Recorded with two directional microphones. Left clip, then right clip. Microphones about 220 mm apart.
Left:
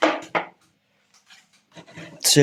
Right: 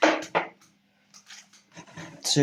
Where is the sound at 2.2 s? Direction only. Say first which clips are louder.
Left 7 dB; 45° left (ahead or behind).